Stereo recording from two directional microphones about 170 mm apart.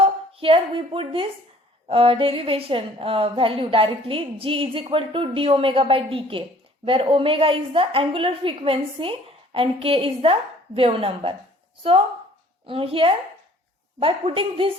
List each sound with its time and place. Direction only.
0.0 s a woman's voice: 35° right (ahead or behind)